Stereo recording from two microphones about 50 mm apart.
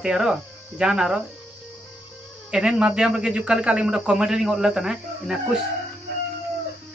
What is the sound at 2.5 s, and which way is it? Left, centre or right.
Speech, centre.